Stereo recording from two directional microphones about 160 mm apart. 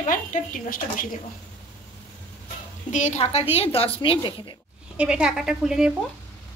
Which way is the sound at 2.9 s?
45° left (ahead or behind).